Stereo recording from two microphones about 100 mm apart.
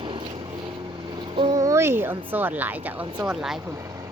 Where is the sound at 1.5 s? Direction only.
30° right (ahead or behind); by 3.6 s 5° right (ahead or behind).